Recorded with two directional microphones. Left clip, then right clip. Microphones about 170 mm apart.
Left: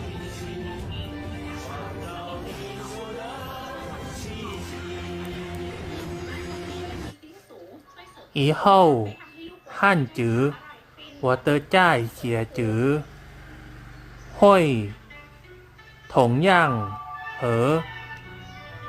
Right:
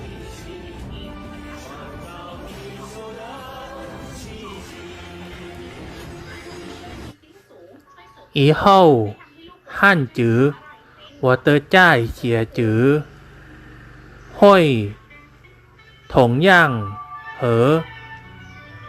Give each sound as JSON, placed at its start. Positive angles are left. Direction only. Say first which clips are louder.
{"t": 4.3, "sound": "music", "louder": "even", "side_deg": 0}
{"t": 8.3, "sound": "speech", "louder": "right 5 dB", "side_deg": -20}
{"t": 14.3, "sound": "speech", "louder": "right 5 dB", "side_deg": -20}
{"t": 16.0, "sound": "speech", "louder": "right 5 dB", "side_deg": -15}